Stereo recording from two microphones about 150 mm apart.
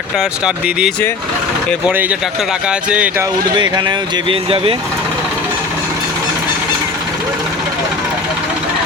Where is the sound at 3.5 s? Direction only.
30° right (ahead or behind).